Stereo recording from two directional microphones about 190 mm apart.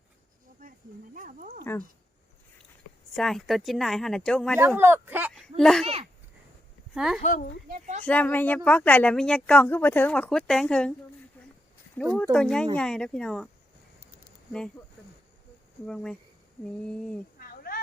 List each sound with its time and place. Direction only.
1.1 s speech: 45° right (ahead or behind)
3.2 s speech: centre (ahead or behind)
4.8 s speech: 10° right (ahead or behind)
5.3 s speech: centre (ahead or behind)
5.8 s a child's voice: 30° right (ahead or behind)
6.9 s speech: 5° right (ahead or behind)
7.2 s speech: 40° left (ahead or behind)
7.7 s a child's voice: 40° right (ahead or behind)
8.0 s speech: 10° left (ahead or behind)
12.1 s speech: 5° left (ahead or behind)
15.9 s speech: 5° left (ahead or behind)
17.3 s a sound: 50° left (ahead or behind)